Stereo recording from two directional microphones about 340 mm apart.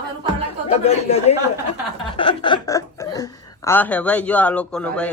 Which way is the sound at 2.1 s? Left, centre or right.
Centre.